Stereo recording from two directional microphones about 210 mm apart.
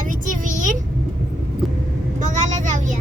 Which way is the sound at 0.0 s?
40° right (ahead or behind).